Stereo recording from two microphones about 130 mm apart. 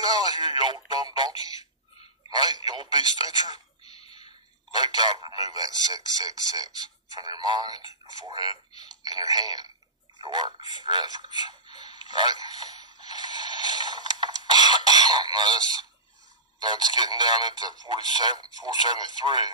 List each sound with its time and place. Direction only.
0.0 s speech: 30° right (ahead or behind)
4.7 s speech: 35° right (ahead or behind)
11.8 s a sound: 35° right (ahead or behind)
16.6 s speech: 35° right (ahead or behind)